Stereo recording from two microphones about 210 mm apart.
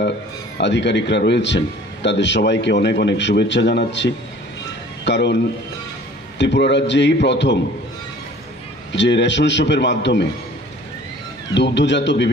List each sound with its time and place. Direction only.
0.6 s a man's voice: 55° left (ahead or behind)
8.9 s a man's voice: 55° left (ahead or behind)
11.5 s a man's voice: 55° left (ahead or behind)